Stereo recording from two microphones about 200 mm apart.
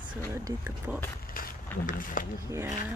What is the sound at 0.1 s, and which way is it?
Speech, 10° right (ahead or behind).